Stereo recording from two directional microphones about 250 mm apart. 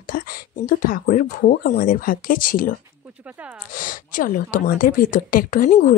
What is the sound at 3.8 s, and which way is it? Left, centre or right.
Speech, left.